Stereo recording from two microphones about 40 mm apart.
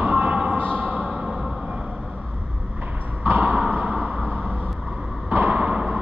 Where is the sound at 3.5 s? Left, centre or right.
Right.